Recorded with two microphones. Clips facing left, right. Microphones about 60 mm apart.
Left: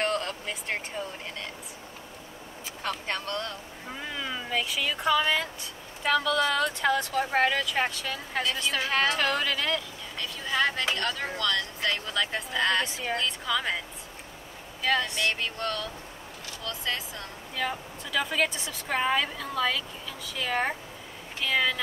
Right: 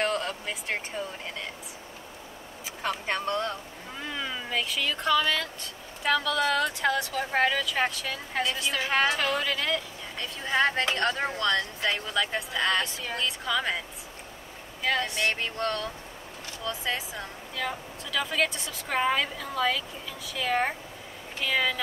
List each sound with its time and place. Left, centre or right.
0.0 s speech: centre
2.8 s speech: centre
4.0 s speech: centre
5.6 s a woman's voice: centre
8.8 s speech: centre
9.1 s a woman's voice: centre
10.1 s speech: right
12.1 s a woman's voice: centre
12.8 s speech: centre
13.1 s a woman's voice: centre
15.0 s speech: right
16.6 s speech: centre
17.6 s a woman's voice: centre